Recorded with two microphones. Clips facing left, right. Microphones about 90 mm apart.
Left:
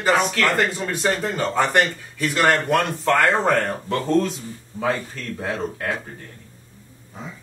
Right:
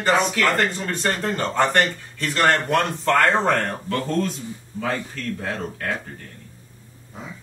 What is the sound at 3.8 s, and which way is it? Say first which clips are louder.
Speech: left 3 dB; 20° left (ahead or behind).